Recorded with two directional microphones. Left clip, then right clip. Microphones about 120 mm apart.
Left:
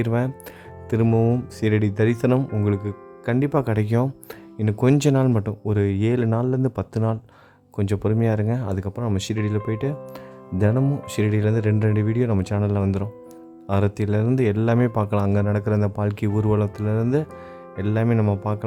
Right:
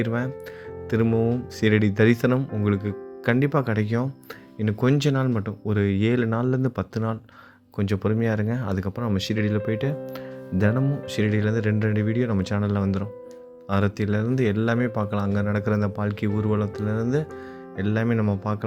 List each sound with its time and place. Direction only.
0.0 s speech: 45° left (ahead or behind)
0.9 s speech: 30° left (ahead or behind)
2.6 s speech: 30° left (ahead or behind)
12.3 s speech: 30° left (ahead or behind)